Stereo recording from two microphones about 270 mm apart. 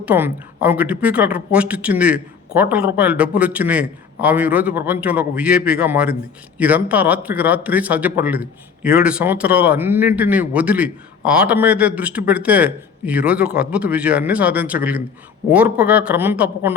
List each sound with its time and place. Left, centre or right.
0.0 s a man's voice: centre